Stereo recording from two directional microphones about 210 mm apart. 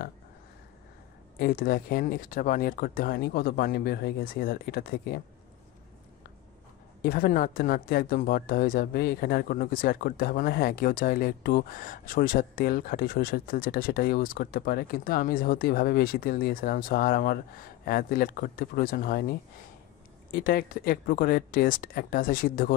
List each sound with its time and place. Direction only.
1.4 s speech: 45° left (ahead or behind)
7.0 s speech: 45° left (ahead or behind)